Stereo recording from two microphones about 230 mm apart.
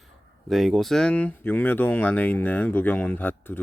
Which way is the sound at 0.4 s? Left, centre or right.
Centre.